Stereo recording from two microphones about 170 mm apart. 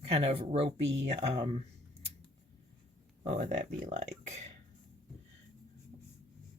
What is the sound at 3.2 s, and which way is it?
Speech, 45° right (ahead or behind).